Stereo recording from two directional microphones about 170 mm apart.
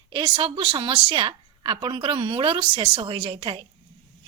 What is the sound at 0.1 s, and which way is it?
A woman's voice, 30° right (ahead or behind).